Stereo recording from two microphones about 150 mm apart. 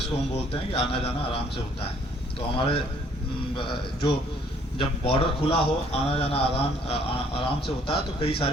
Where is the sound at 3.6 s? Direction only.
35° left (ahead or behind).